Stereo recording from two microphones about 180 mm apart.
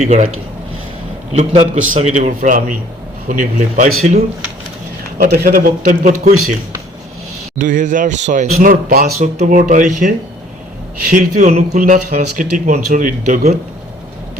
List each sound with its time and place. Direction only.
0.0 s speech: 40° right (ahead or behind)
1.4 s a man's voice: 40° right (ahead or behind)
5.1 s a man's voice: 60° right (ahead or behind)
7.6 s a man's voice: 45° right (ahead or behind)
9.1 s a man's voice: 40° right (ahead or behind)
11.1 s a man's voice: 45° right (ahead or behind)